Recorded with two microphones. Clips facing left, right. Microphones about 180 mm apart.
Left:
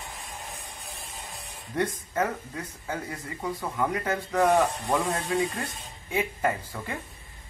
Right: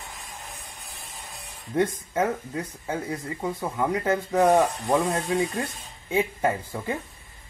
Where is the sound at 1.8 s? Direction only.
25° right (ahead or behind).